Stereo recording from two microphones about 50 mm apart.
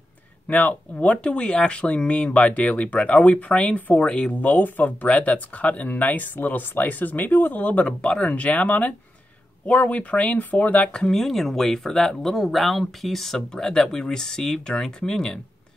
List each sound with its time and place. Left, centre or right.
0.5 s speech: left
8.0 s speech: left
10.9 s speech: centre